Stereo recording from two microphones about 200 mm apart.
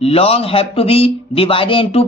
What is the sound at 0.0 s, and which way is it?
A man's voice, 30° left (ahead or behind).